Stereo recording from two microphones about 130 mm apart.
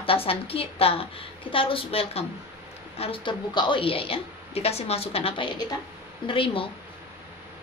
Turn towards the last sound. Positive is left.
turn(degrees=45)  # may be behind; listen again after turning